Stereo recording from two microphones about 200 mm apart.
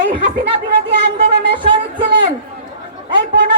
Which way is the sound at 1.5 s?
25° right (ahead or behind).